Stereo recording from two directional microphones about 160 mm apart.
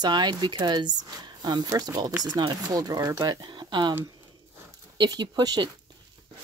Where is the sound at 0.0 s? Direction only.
25° right (ahead or behind).